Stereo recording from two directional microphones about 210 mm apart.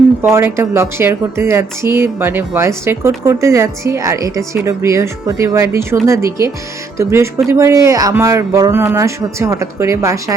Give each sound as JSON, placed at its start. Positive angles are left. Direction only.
{"t": 0.2, "sound": "a woman's voice", "side_deg": -10}